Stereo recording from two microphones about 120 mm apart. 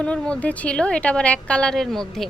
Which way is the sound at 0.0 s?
10° left (ahead or behind).